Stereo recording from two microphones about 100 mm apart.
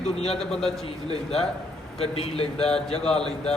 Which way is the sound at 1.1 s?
90° left.